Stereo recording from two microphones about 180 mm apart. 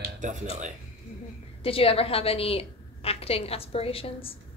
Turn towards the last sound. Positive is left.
turn(degrees=30)  # may be behind; listen again after turning